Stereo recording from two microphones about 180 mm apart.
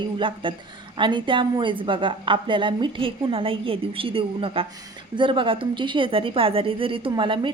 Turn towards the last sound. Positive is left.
turn(degrees=-25)  # may be behind; listen again after turning